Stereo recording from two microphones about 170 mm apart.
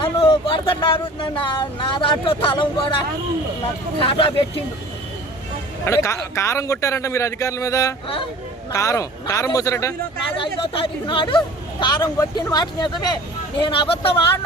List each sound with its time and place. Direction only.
0.0 s speech: 30° left (ahead or behind)
4.1 s speech: 30° left (ahead or behind)
5.8 s a man's voice: 15° left (ahead or behind)
10.4 s speech: 30° left (ahead or behind)